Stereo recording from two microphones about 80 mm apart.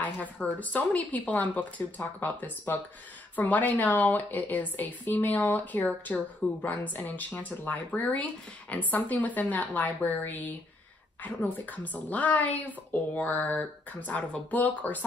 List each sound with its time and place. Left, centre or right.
0.0 s a woman's voice: centre